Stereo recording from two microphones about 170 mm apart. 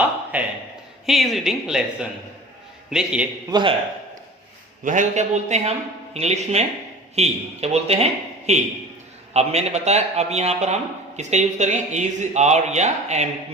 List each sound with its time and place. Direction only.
0.3 s a sound: 10° right (ahead or behind)
1.0 s speech: centre (ahead or behind)
3.5 s a man's voice: 30° right (ahead or behind)
4.8 s a man's voice: 50° right (ahead or behind)